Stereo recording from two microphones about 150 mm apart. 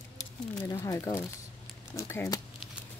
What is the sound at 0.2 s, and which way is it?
Speech, 20° left (ahead or behind).